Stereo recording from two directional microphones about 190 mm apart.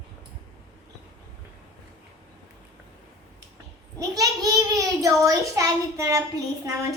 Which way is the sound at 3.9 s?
20° right (ahead or behind).